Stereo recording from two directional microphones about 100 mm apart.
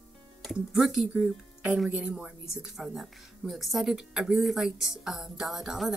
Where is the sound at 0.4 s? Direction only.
Centre (ahead or behind).